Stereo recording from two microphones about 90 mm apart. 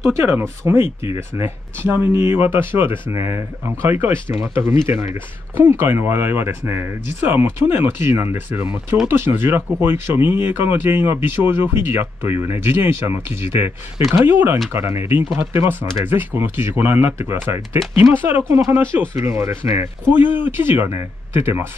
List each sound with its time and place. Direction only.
0.0 s speech: 30° right (ahead or behind)